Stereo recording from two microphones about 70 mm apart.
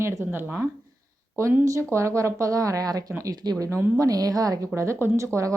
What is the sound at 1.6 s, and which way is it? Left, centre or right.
A woman's voice, right.